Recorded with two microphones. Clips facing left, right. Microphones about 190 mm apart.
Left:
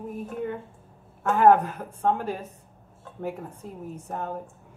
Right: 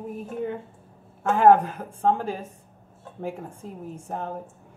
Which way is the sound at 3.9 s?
25° right (ahead or behind).